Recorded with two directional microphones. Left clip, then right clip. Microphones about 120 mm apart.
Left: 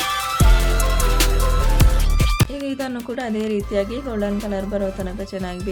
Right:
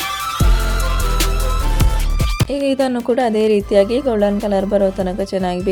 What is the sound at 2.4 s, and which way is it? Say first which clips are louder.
Speech: right 10 dB; 55° right (ahead or behind).